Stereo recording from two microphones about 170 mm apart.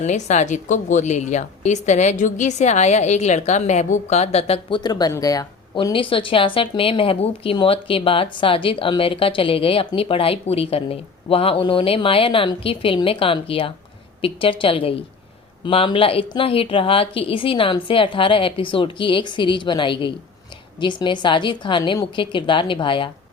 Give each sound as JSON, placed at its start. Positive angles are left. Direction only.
{"t": 0.0, "sound": "a woman's voice", "side_deg": 45}